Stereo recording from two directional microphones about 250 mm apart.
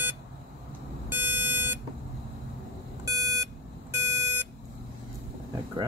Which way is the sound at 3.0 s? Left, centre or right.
Centre.